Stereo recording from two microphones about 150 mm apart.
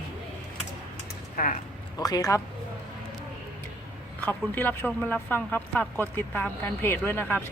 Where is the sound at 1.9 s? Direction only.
25° left (ahead or behind).